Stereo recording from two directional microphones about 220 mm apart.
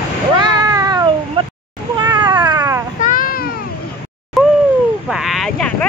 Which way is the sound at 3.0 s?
40° left (ahead or behind).